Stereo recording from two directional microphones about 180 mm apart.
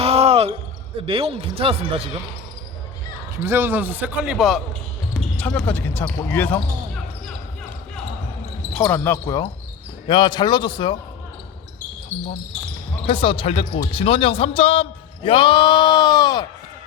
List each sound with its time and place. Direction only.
0.0 s basketball bounce: 35° right (ahead or behind)
1.0 s speech: 30° right (ahead or behind)
3.4 s speech: 15° right (ahead or behind); by 7.0 s 10° left (ahead or behind)
8.8 s a man's voice: 15° left (ahead or behind)
12.1 s speech: 10° left (ahead or behind)
13.1 s a man's voice: 30° left (ahead or behind)